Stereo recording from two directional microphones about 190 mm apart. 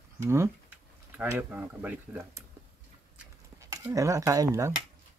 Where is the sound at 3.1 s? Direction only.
10° right (ahead or behind).